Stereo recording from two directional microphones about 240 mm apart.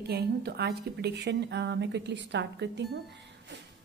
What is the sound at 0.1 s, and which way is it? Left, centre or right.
A woman's voice, right.